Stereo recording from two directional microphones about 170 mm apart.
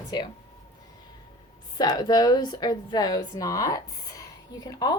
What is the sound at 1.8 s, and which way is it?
A woman's voice, 25° left (ahead or behind).